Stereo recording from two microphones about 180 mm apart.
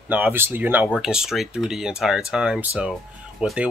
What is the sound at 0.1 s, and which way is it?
Speech, 10° right (ahead or behind).